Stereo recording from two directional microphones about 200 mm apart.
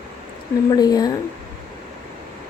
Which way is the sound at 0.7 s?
20° left (ahead or behind).